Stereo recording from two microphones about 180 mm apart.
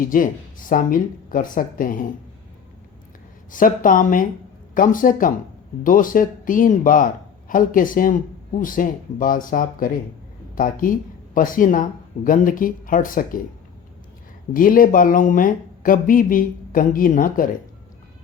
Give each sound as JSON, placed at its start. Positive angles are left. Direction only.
{"t": 0.0, "sound": "speech", "side_deg": 50}
{"t": 3.5, "sound": "speech", "side_deg": 50}
{"t": 14.5, "sound": "speech", "side_deg": 50}